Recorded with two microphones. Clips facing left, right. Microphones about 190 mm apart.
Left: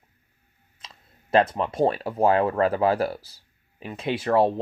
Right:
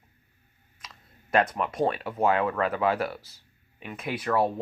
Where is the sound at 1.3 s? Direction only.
30° left (ahead or behind).